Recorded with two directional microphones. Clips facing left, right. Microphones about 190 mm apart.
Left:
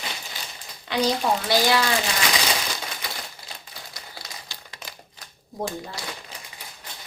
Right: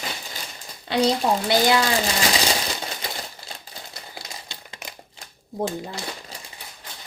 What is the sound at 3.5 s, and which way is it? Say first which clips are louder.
Typewriter: right 2 dB; 25° right (ahead or behind).